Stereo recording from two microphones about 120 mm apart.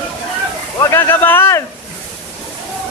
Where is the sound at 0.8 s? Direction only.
20° left (ahead or behind).